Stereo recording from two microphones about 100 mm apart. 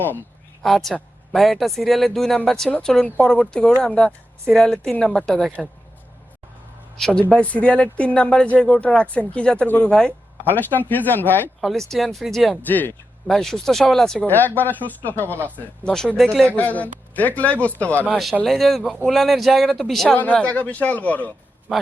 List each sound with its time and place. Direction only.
0.6 s speech: centre (ahead or behind)
7.0 s speech: 10° left (ahead or behind)
11.6 s speech: centre (ahead or behind)
12.6 s speech: 20° left (ahead or behind)
13.2 s speech: 5° left (ahead or behind)
14.3 s speech: 20° left (ahead or behind)
15.9 s speech: 5° left (ahead or behind)
16.5 s speech: 15° left (ahead or behind)
18.4 s speech: centre (ahead or behind)
21.7 s a man's voice: 5° right (ahead or behind)